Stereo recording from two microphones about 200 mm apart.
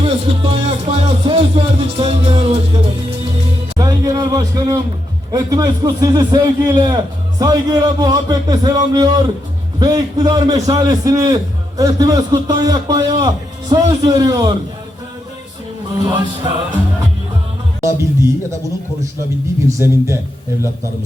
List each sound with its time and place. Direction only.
0.0 s music: 30° right (ahead or behind)
3.8 s a sound: 20° right (ahead or behind)
5.3 s a man's voice: 20° right (ahead or behind)
16.0 s a man's voice: 20° right (ahead or behind)
17.7 s music: 15° right (ahead or behind)
19.6 s music: 15° right (ahead or behind)